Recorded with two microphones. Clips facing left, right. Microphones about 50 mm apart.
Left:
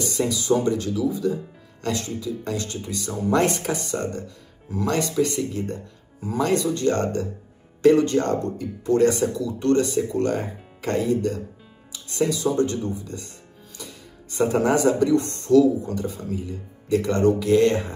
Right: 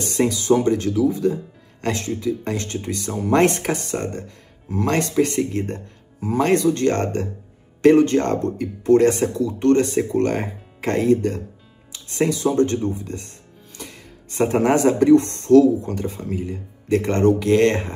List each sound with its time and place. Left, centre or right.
0.0 s speech: right